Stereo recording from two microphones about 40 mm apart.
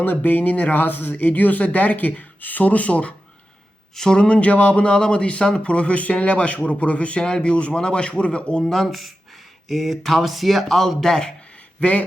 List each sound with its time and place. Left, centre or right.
0.0 s speech: left
3.9 s speech: centre
4.2 s speech: left
7.5 s speech: left
8.6 s speech: centre